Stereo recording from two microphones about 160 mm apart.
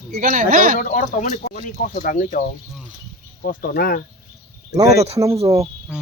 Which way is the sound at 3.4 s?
65° left (ahead or behind).